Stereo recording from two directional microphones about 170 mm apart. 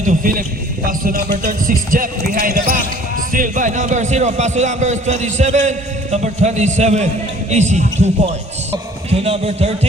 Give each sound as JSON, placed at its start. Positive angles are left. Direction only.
{"t": 0.0, "sound": "a man's voice", "side_deg": -50}